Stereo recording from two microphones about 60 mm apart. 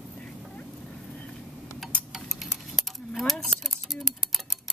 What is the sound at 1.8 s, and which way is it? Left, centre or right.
Tick-tock, centre.